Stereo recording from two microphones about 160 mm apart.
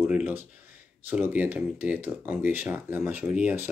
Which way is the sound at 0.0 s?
10° right (ahead or behind).